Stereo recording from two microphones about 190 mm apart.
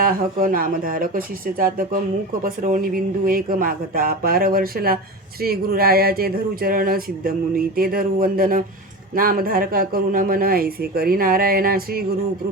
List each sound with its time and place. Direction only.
0.0 s speech: 45° right (ahead or behind)